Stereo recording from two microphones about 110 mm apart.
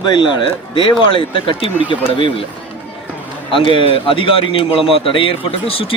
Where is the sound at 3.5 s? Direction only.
50° left (ahead or behind).